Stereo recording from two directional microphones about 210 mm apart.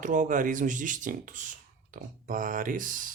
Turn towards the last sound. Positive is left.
turn(degrees=-40)  # may be behind; listen again after turning